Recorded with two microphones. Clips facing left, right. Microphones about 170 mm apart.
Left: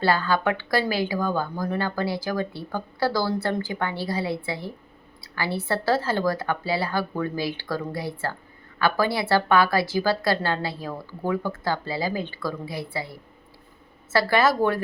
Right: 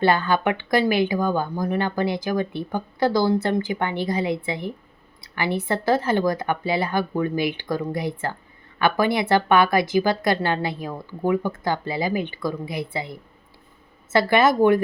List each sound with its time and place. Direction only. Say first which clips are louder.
0.0 s speech: right 2 dB; 20° right (ahead or behind)